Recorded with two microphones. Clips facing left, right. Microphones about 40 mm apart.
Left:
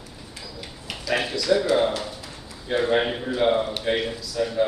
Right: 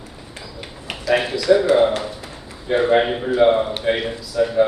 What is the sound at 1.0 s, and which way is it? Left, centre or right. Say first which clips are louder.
A man's voice: right 6 dB; centre.